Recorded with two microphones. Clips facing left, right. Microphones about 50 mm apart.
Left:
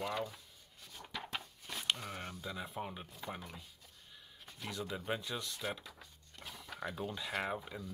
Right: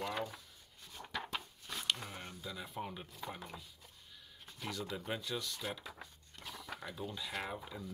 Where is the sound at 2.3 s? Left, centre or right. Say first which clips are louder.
Left 2 dB; left.